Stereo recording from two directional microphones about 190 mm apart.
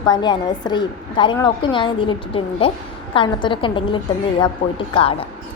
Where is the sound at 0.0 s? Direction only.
20° left (ahead or behind).